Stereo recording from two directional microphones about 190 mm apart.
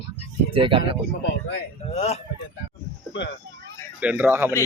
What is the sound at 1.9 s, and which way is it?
Speech, 35° left (ahead or behind).